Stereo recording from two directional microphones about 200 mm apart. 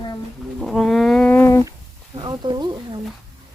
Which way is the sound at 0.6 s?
Centre (ahead or behind).